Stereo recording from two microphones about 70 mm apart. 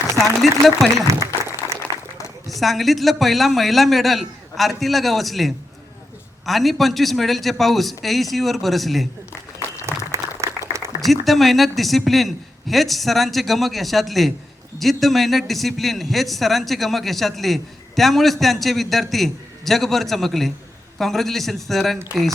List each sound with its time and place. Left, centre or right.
0.2 s a man's voice: centre
0.9 s speech: right
2.5 s a man's voice: centre
10.1 s applause: right
10.7 s a sound: right
11.0 s a man's voice: centre